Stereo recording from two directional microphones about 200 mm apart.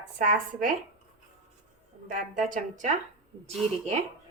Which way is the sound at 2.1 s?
40° right (ahead or behind).